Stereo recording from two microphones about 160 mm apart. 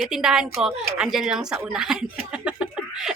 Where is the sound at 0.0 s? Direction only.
5° right (ahead or behind).